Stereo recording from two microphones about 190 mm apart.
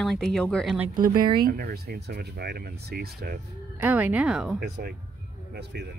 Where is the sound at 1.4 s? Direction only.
50° right (ahead or behind).